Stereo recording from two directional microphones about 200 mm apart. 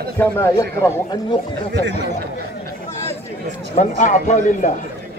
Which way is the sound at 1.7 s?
60° right (ahead or behind).